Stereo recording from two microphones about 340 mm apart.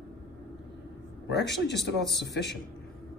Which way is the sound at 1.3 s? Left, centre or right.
Left.